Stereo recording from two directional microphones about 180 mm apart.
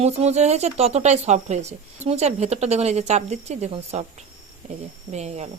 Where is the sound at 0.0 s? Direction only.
35° right (ahead or behind).